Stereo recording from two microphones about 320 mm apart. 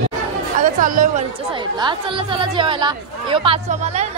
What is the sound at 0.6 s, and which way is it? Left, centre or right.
Speech, right.